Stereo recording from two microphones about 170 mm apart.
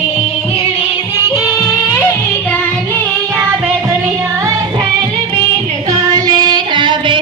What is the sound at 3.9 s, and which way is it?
Music, 15° right (ahead or behind).